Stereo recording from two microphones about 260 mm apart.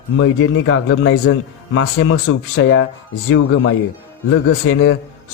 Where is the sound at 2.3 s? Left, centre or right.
Left.